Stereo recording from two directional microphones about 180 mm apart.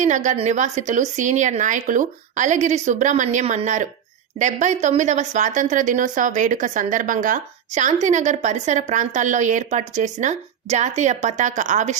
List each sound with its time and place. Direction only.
0.0 s a woman's voice: 40° right (ahead or behind)